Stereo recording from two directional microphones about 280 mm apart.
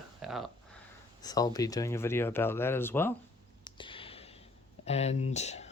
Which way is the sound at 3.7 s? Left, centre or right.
Centre.